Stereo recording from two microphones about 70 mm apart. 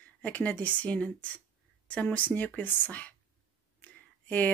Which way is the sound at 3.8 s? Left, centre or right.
Left.